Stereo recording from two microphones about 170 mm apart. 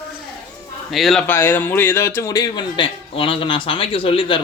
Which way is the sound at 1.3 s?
15° left (ahead or behind).